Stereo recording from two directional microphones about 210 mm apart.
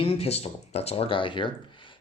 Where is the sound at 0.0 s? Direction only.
30° left (ahead or behind).